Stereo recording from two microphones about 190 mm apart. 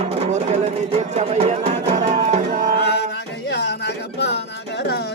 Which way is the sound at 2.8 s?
60° left (ahead or behind).